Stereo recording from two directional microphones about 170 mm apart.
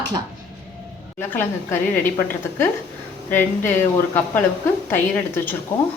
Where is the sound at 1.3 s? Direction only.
10° left (ahead or behind).